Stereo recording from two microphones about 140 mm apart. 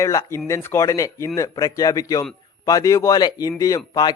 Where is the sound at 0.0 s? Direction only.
20° left (ahead or behind).